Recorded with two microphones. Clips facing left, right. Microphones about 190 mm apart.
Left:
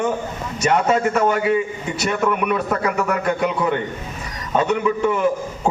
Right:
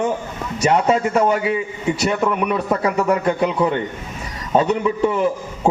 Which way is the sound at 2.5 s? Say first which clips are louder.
Right 1 dB; 30° right (ahead or behind).